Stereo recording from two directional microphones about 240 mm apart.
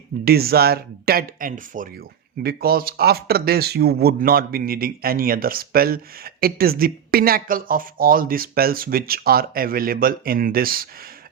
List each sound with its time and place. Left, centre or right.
0.3 s speech: right